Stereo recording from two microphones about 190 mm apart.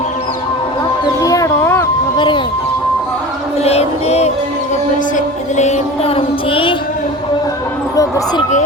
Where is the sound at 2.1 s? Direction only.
25° left (ahead or behind).